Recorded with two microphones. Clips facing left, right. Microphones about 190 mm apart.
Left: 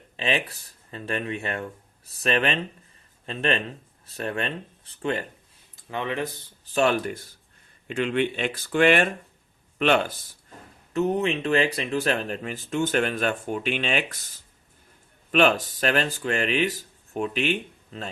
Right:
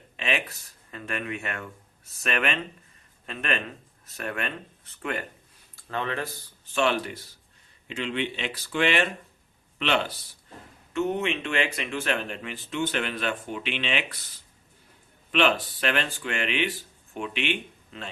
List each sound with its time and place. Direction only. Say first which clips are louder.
0.2 s speech: left 3 dB; 30° left (ahead or behind)
5.7 s speech: left 2 dB; 15° left (ahead or behind)
6.7 s speech: left 3 dB; 40° left (ahead or behind)
10.9 s speech: left 3 dB; 35° left (ahead or behind)